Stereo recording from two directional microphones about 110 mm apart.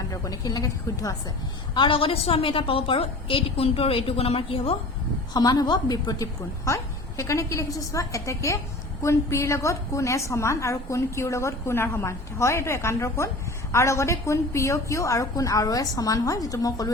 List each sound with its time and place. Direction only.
0.1 s a woman's voice: 35° left (ahead or behind)
1.7 s a woman's voice: 50° left (ahead or behind)
5.3 s a woman's voice: 40° left (ahead or behind)